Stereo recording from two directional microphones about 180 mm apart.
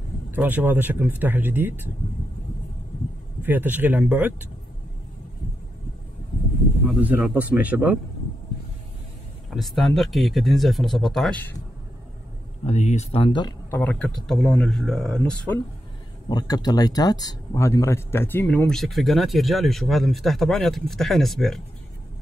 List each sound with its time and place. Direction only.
0.3 s speech: 10° right (ahead or behind)
3.4 s speech: 10° right (ahead or behind)
6.9 s speech: 10° right (ahead or behind)
9.5 s speech: centre (ahead or behind)
12.6 s speech: 40° left (ahead or behind)
13.7 s speech: 10° left (ahead or behind)
16.3 s speech: 20° left (ahead or behind); by 21.6 s centre (ahead or behind)